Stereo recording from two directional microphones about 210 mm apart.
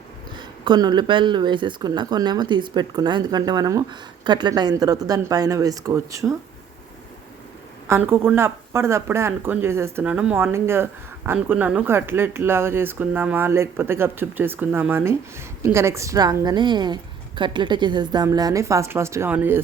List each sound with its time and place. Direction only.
0.3 s speech: 20° right (ahead or behind)
7.9 s a woman's voice: 10° right (ahead or behind)